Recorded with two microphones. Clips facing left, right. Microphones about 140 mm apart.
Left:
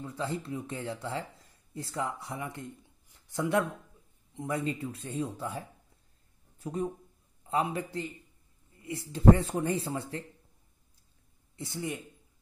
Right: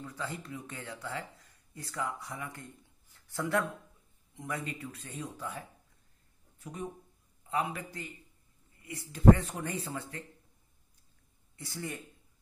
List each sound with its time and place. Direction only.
0.0 s speech: 30° left (ahead or behind)
6.6 s speech: 30° left (ahead or behind)
11.5 s speech: 25° left (ahead or behind)